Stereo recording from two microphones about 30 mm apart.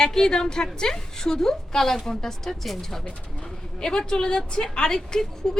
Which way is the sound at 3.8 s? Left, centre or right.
Left.